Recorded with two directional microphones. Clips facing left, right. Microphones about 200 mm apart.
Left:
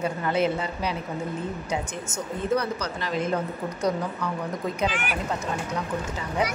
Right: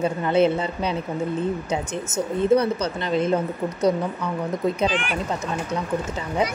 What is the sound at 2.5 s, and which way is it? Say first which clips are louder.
Speech: right 6 dB; 25° right (ahead or behind).